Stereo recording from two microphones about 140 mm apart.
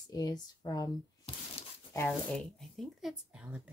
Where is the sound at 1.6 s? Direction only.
45° left (ahead or behind).